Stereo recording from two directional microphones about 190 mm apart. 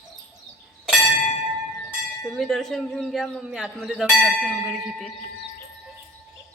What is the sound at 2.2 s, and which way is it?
A man's voice, 5° left (ahead or behind).